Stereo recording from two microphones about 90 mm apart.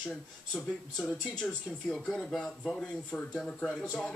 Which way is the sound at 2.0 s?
5° left (ahead or behind).